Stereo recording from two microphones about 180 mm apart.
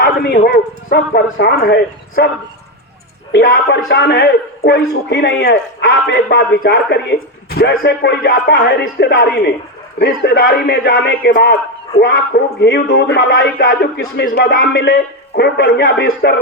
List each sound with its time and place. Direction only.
0.0 s a man's voice: 60° left (ahead or behind)
3.3 s a man's voice: 60° left (ahead or behind)